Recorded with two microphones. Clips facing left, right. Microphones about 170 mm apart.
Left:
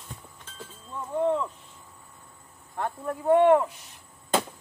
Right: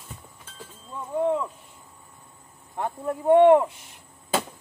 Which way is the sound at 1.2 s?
10° right (ahead or behind).